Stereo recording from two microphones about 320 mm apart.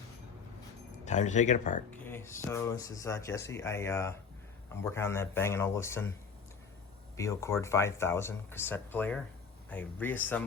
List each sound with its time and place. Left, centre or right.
1.0 s speech: left
1.9 s speech: centre
7.2 s speech: centre